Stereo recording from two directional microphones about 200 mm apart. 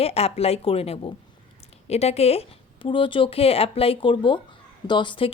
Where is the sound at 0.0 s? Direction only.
30° left (ahead or behind).